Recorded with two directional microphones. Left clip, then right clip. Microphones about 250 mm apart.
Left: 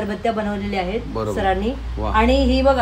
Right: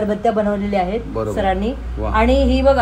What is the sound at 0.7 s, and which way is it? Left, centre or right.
Speech, centre.